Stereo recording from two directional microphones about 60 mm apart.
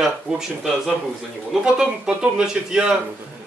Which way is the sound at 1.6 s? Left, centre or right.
Centre.